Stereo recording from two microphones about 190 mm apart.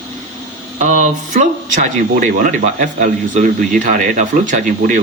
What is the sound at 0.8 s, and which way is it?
Speech, 40° right (ahead or behind).